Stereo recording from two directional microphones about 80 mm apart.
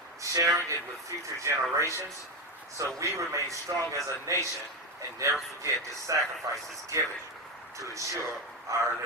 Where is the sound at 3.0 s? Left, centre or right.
Right.